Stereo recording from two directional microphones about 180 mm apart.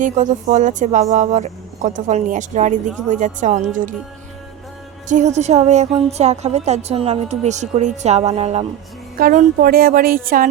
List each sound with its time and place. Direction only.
0.0 s speech: 45° right (ahead or behind)
5.0 s a woman's voice: 40° right (ahead or behind)
9.1 s speech: 55° right (ahead or behind)